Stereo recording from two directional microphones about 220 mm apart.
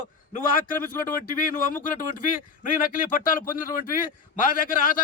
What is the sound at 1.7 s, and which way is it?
Speech, 40° left (ahead or behind).